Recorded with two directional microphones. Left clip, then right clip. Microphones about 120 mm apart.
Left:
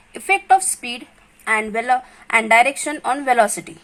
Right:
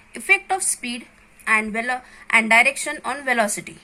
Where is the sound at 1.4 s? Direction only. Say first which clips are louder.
Left 1 dB; 40° left (ahead or behind).